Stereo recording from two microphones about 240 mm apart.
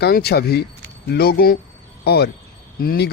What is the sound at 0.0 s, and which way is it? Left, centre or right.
Speech, left.